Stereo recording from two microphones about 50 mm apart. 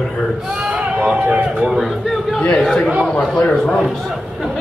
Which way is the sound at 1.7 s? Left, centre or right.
Centre.